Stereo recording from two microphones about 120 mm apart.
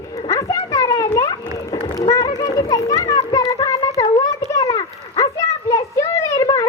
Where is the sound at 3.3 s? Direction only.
30° left (ahead or behind).